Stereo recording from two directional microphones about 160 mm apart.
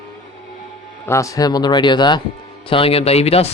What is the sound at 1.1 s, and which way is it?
Speech, 20° left (ahead or behind).